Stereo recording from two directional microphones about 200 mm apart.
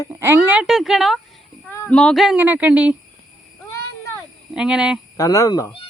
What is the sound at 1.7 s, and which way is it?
Speech, 10° left (ahead or behind).